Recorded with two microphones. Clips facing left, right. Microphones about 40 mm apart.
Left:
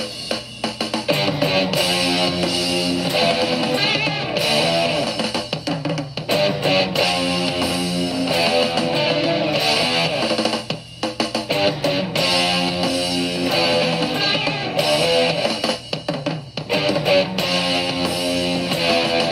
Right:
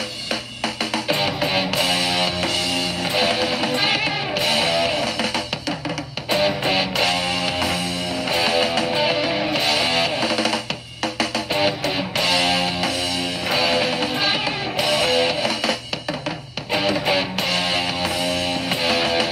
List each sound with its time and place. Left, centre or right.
1.0 s music: centre
1.9 s music: centre
2.4 s music: right
3.2 s music: centre
4.9 s music: right
6.3 s music: centre
7.1 s music: right
8.4 s music: centre
10.2 s music: right
12.3 s music: centre
16.7 s music: centre
18.0 s music: right
18.9 s music: centre